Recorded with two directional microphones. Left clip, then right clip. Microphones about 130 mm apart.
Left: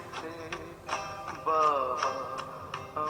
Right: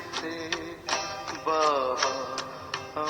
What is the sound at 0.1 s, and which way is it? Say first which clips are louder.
Music: right 7 dB; 40° right (ahead or behind).